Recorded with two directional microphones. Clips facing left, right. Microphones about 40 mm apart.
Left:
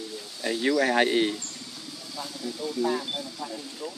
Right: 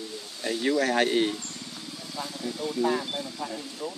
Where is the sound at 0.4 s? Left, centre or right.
Centre.